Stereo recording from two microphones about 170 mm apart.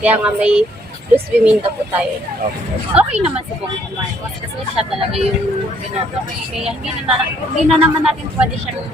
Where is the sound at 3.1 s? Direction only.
40° right (ahead or behind).